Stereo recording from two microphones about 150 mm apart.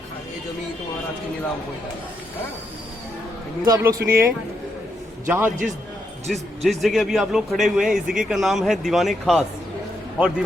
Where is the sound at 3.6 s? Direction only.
20° right (ahead or behind).